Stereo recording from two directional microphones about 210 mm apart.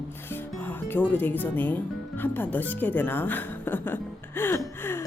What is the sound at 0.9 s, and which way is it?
Speech, 10° left (ahead or behind).